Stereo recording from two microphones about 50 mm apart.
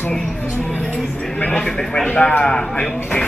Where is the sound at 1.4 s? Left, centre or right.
Centre.